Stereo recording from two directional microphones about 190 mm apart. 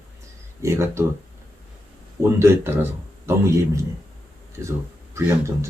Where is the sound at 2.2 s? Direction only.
15° right (ahead or behind).